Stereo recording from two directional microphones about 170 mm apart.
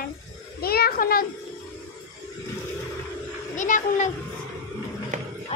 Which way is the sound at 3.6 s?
50° left (ahead or behind).